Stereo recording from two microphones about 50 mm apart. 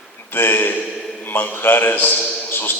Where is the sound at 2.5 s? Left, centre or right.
Left.